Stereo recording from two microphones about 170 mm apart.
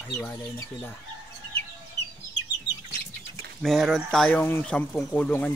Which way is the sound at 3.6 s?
Centre (ahead or behind).